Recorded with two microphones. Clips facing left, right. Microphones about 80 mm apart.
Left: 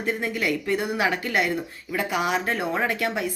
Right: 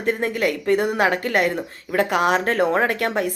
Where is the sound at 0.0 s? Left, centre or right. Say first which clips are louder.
Right 5 dB; right.